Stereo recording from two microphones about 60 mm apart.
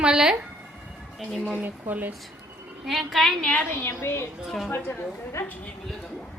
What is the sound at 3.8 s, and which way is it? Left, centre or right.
Speech, left.